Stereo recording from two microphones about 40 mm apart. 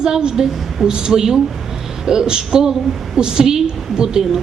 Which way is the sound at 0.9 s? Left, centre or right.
Centre.